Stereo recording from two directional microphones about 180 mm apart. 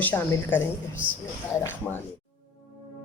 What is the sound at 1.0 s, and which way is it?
Speech, 10° right (ahead or behind).